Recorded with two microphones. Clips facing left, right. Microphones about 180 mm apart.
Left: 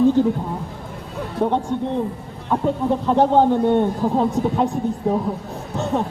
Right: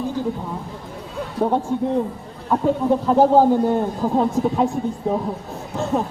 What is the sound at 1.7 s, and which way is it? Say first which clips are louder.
Speech: right 2 dB; 5° right (ahead or behind).